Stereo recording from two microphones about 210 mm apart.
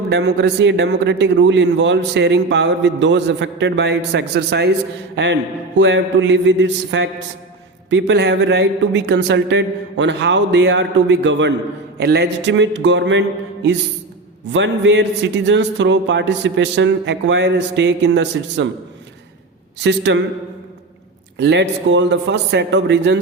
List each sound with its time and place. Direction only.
0.1 s a man's voice: 55° right (ahead or behind)
19.8 s a man's voice: 55° right (ahead or behind)
21.3 s a man's voice: 55° right (ahead or behind)